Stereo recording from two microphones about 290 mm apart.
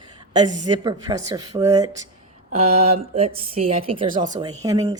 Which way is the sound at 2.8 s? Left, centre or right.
Centre.